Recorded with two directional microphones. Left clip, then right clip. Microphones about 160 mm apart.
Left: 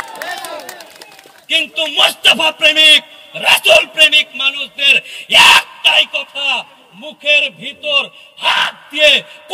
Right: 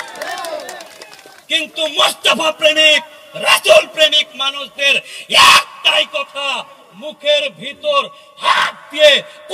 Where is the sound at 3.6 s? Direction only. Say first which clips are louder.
Left 1 dB; 45° left (ahead or behind).